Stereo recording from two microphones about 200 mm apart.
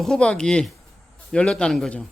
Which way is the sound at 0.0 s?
5° left (ahead or behind).